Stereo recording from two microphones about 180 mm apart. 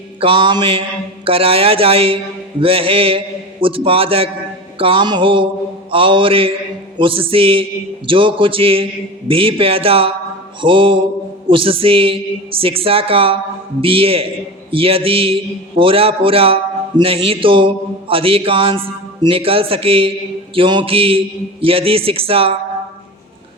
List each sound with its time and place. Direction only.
0.2 s music: 30° right (ahead or behind)
1.2 s mantra: 30° right (ahead or behind)
4.8 s music: 30° right (ahead or behind)
7.0 s mantra: 30° right (ahead or behind)
10.6 s music: 30° right (ahead or behind)
11.4 s mantra: 30° right (ahead or behind)
17.0 s music: 30° right (ahead or behind)
18.1 s mantra: 30° right (ahead or behind)